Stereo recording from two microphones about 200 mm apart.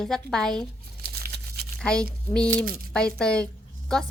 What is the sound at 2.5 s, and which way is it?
Speech, 45° right (ahead or behind).